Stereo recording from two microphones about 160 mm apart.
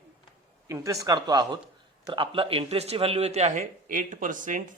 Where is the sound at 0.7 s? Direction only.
20° right (ahead or behind).